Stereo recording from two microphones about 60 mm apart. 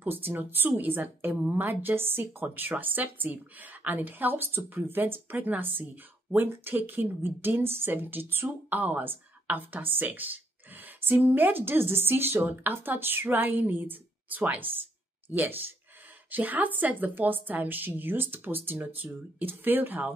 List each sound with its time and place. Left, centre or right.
0.0 s a woman's voice: right